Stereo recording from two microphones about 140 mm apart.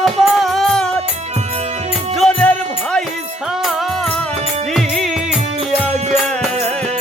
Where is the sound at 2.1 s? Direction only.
5° left (ahead or behind).